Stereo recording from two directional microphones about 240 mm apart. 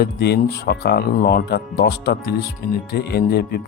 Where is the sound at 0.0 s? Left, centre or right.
Left.